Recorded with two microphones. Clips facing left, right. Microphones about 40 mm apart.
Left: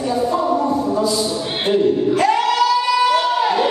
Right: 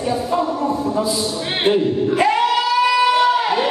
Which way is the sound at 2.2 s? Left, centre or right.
Centre.